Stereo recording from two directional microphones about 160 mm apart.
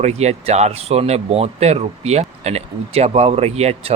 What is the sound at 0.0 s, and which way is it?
Speech, 45° right (ahead or behind).